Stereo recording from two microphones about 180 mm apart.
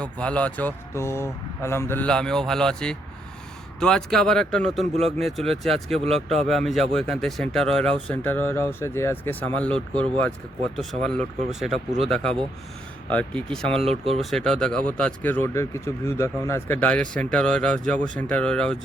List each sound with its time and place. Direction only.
0.0 s speech: 5° left (ahead or behind)
13.7 s speech: 35° right (ahead or behind)
14.2 s speech: centre (ahead or behind)